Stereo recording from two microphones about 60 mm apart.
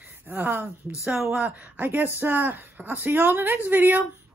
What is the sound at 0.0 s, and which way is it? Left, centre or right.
Speech, right.